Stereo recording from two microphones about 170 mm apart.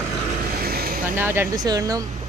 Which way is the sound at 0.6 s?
60° right (ahead or behind).